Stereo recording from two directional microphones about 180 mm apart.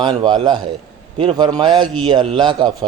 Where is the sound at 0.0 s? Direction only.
25° right (ahead or behind).